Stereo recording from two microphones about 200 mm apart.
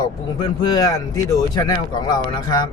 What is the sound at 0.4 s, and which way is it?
Speech, 20° left (ahead or behind).